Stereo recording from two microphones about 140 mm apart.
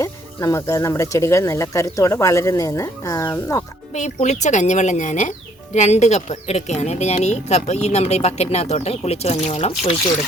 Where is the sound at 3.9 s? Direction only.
55° left (ahead or behind).